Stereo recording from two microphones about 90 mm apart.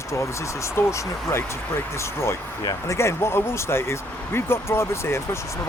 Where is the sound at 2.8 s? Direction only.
30° left (ahead or behind).